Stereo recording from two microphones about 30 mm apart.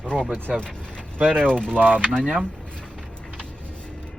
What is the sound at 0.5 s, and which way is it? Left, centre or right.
Speech, right.